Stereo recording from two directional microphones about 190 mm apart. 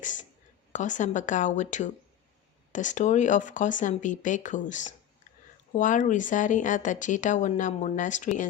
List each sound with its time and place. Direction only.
0.0 s speech: 40° left (ahead or behind)